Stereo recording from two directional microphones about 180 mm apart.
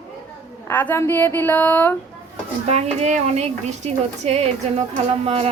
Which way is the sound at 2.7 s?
35° right (ahead or behind).